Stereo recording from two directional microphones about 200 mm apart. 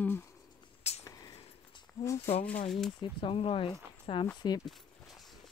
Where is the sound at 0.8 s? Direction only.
30° left (ahead or behind).